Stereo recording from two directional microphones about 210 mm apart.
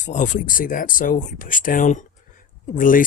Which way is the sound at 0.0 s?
35° left (ahead or behind).